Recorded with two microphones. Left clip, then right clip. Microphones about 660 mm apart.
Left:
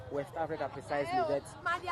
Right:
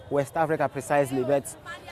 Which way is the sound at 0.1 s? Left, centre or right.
Right.